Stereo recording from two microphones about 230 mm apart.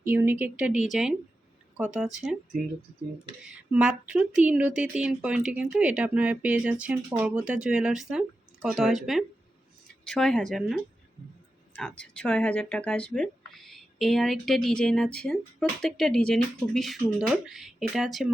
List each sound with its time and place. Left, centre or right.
0.0 s speech: centre
3.4 s speech: centre
11.8 s speech: centre